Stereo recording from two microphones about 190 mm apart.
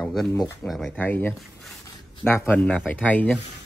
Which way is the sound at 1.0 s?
10° left (ahead or behind).